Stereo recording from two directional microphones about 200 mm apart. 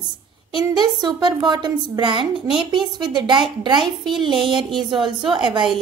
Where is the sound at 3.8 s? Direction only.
Centre (ahead or behind).